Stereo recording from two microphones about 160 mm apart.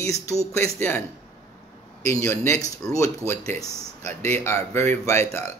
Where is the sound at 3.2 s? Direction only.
15° right (ahead or behind).